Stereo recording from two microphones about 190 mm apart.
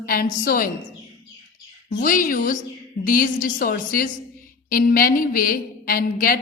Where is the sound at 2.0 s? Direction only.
45° left (ahead or behind).